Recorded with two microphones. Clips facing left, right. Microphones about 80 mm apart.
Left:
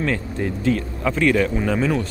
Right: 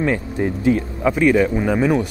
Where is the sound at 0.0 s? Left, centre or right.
Centre.